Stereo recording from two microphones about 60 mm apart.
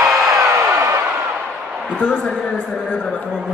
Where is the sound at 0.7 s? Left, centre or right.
Right.